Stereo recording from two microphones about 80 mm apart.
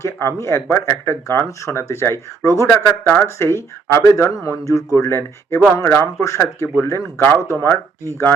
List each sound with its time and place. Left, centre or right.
0.0 s speech: left